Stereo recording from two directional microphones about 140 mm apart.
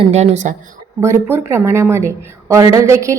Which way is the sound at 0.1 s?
55° right (ahead or behind).